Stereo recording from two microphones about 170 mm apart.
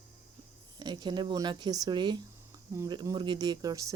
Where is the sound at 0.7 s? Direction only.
25° right (ahead or behind).